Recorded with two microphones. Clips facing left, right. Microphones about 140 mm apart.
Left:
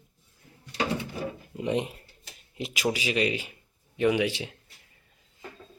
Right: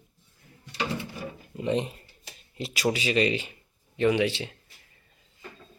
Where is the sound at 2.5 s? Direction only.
15° left (ahead or behind).